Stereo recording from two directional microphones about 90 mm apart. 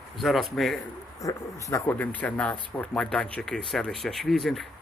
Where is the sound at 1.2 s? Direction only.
35° left (ahead or behind).